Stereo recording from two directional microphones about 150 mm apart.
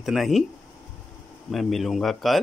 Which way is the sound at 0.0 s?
Centre (ahead or behind).